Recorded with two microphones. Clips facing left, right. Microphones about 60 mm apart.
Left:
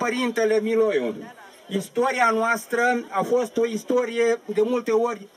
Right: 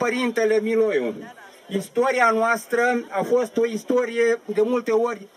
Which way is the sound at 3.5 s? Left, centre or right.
Right.